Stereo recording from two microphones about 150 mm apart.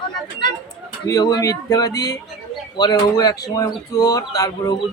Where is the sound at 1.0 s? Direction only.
30° left (ahead or behind).